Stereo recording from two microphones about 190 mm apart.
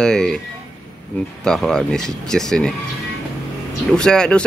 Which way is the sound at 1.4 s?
5° left (ahead or behind).